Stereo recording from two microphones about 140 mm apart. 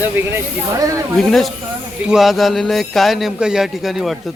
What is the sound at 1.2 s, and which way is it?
A man's voice, centre (ahead or behind).